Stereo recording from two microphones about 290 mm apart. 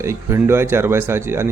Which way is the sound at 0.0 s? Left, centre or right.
Centre.